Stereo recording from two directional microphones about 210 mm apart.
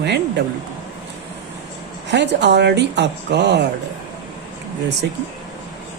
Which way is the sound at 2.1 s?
55° right (ahead or behind).